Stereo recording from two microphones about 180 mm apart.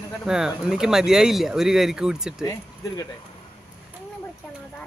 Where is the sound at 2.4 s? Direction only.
20° left (ahead or behind).